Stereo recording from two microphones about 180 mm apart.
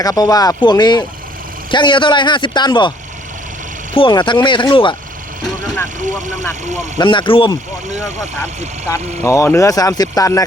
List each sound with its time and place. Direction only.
0.0 s a man's voice: 20° left (ahead or behind)
3.9 s a man's voice: 25° left (ahead or behind)
6.0 s speech: 45° right (ahead or behind)
7.0 s a man's voice: 25° left (ahead or behind)
8.9 s speech: 15° left (ahead or behind)